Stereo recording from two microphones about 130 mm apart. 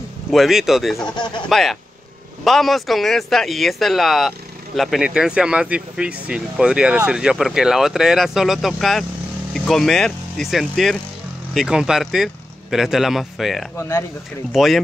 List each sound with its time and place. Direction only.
0.3 s speech: centre (ahead or behind)
1.1 s speech: 35° left (ahead or behind)
1.5 s speech: centre (ahead or behind)
13.7 s speech: 25° left (ahead or behind)
14.5 s speech: centre (ahead or behind)